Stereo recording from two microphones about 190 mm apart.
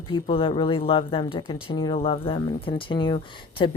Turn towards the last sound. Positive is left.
turn(degrees=25)  # may be behind; listen again after turning